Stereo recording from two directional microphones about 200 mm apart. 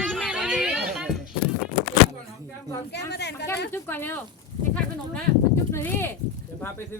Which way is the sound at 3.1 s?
55° left (ahead or behind).